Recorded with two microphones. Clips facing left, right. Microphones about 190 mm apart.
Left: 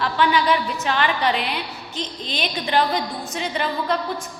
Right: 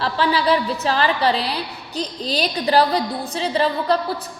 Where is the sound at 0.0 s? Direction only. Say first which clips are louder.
Even; 30° right (ahead or behind).